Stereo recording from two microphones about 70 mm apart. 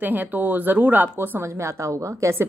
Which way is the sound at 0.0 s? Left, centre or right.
Right.